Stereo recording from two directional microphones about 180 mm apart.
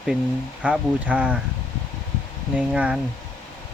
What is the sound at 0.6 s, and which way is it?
Speech, 5° right (ahead or behind).